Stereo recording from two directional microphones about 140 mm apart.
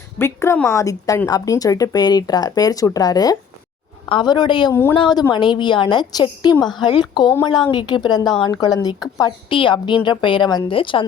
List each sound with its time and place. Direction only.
0.2 s a woman's voice: 15° left (ahead or behind); by 4.7 s 35° left (ahead or behind)
4.7 s a woman's voice: 20° left (ahead or behind)
4.9 s a woman's voice: 30° left (ahead or behind)